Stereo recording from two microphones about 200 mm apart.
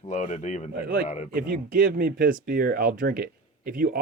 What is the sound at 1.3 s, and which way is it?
Speech, 45° right (ahead or behind).